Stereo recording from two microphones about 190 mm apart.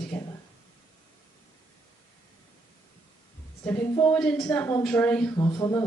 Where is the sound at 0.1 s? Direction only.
10° left (ahead or behind).